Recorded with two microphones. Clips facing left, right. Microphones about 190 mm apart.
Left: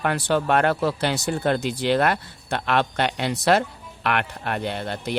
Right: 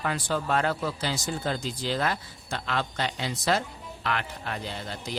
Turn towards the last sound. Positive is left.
turn(degrees=65)  # may be behind; listen again after turning